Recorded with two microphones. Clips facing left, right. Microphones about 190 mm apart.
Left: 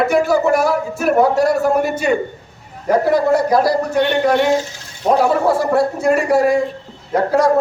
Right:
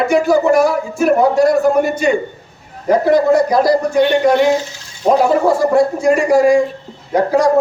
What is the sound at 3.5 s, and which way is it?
Speech, 5° left (ahead or behind).